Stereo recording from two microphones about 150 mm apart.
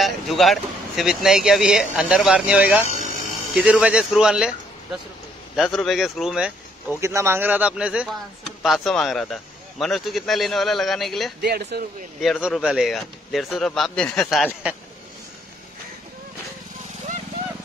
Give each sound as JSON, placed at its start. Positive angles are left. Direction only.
{"t": 0.0, "sound": "a man's voice", "side_deg": 0}
{"t": 5.6, "sound": "a man's voice", "side_deg": 0}
{"t": 7.0, "sound": "a man's voice", "side_deg": -20}
{"t": 11.4, "sound": "speech", "side_deg": -90}
{"t": 12.2, "sound": "a man's voice", "side_deg": -5}